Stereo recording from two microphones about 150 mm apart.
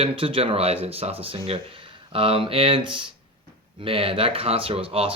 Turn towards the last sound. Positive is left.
turn(degrees=-40)  # may be behind; listen again after turning